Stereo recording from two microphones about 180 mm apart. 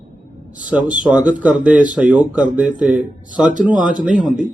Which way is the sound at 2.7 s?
45° right (ahead or behind).